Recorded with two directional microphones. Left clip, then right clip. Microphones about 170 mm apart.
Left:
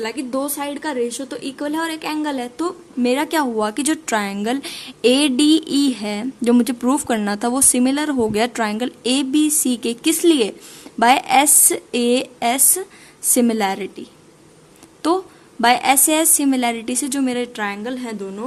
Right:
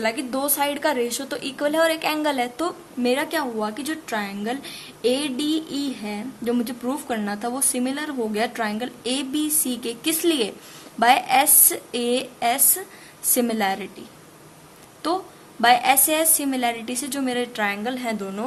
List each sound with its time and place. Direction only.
0.0 s a woman's voice: 25° left (ahead or behind)
3.1 s a woman's voice: 45° left (ahead or behind)
15.0 s a woman's voice: 50° left (ahead or behind); by 18.4 s 30° left (ahead or behind)